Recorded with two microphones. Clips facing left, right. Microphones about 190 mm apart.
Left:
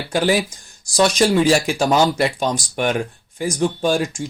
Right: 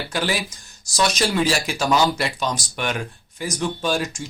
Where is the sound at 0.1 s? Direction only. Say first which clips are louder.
Left 9 dB; 45° left (ahead or behind).